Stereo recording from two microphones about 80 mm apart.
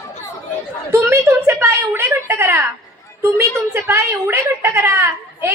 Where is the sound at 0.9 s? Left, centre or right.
Right.